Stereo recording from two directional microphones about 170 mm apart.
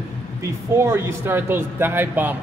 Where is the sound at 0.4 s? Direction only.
15° right (ahead or behind).